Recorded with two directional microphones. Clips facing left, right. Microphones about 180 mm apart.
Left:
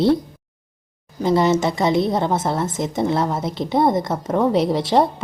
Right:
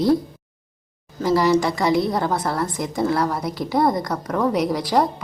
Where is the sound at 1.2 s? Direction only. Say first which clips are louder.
Left 1 dB; 20° left (ahead or behind).